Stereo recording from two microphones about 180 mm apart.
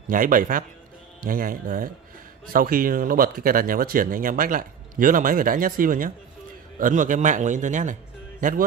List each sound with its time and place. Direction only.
0.1 s a man's voice: 50° right (ahead or behind)